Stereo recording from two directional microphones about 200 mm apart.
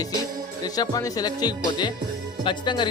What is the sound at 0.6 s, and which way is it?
Speech, 20° left (ahead or behind).